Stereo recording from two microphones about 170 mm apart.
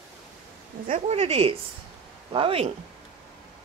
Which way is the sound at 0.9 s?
40° right (ahead or behind).